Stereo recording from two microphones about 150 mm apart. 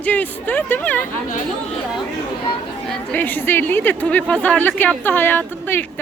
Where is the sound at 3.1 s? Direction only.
10° left (ahead or behind).